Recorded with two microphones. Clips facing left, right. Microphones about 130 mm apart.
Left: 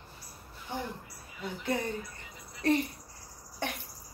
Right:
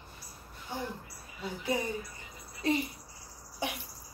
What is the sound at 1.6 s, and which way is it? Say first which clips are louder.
Speech: even; 10° right (ahead or behind).